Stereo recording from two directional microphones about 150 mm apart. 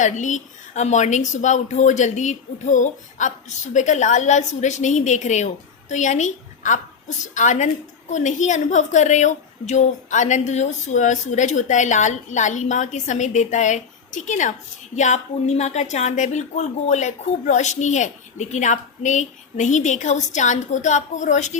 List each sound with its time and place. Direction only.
0.0 s a woman's voice: 55° left (ahead or behind)